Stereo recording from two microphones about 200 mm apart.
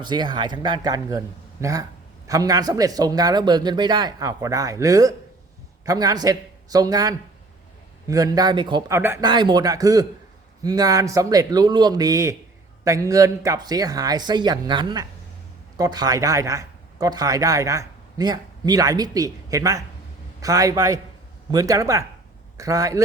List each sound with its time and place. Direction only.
0.0 s a man's voice: 20° right (ahead or behind)
9.0 s a man's voice: 10° right (ahead or behind)